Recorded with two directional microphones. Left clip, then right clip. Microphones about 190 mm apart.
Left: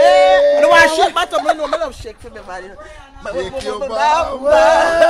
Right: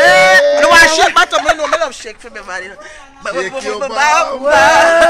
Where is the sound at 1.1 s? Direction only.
15° left (ahead or behind).